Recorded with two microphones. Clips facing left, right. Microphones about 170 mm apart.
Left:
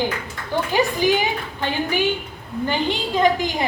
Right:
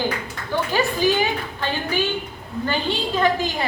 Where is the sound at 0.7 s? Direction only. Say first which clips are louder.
Left 2 dB; 15° left (ahead or behind).